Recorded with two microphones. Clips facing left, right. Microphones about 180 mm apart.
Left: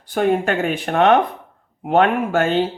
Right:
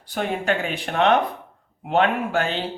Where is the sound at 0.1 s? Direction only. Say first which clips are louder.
Left 6 dB; 50° left (ahead or behind).